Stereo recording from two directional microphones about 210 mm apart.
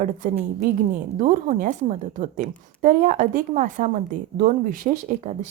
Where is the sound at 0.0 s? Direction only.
40° right (ahead or behind).